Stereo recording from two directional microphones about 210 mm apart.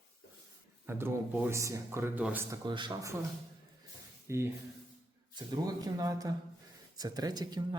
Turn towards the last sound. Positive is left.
turn(degrees=-20)  # may be behind; listen again after turning